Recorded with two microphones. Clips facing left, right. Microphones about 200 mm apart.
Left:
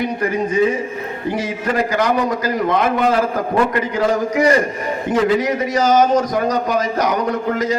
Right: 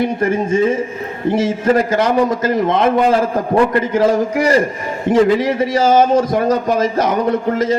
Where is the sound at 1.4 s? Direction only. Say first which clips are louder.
Right 6 dB; 25° right (ahead or behind).